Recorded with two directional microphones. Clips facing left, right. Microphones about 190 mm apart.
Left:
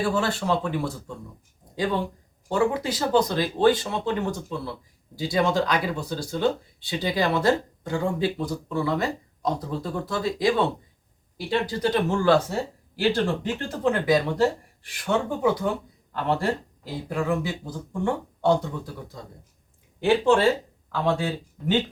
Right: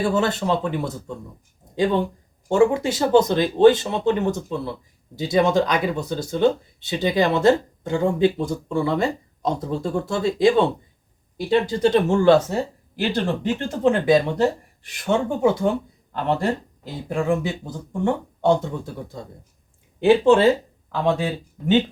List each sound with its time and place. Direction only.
0.0 s speech: 20° right (ahead or behind)
13.7 s speech: 25° right (ahead or behind)